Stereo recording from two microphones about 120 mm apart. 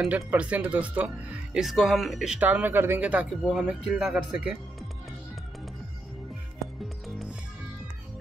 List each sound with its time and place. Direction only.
0.1 s speech: 10° right (ahead or behind)
6.6 s music: centre (ahead or behind)